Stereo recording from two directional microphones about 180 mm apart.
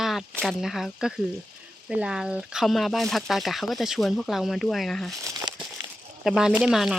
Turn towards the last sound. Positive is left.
turn(degrees=0)  # may be behind; listen again after turning